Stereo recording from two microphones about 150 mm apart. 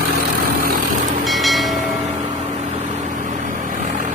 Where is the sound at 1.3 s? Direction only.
Centre (ahead or behind).